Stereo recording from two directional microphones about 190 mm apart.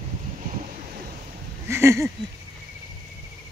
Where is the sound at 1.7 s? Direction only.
15° right (ahead or behind).